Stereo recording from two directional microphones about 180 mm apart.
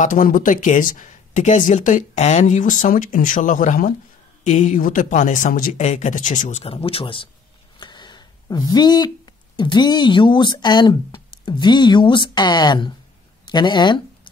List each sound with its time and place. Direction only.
0.0 s speech: 50° left (ahead or behind); by 14.3 s 25° left (ahead or behind)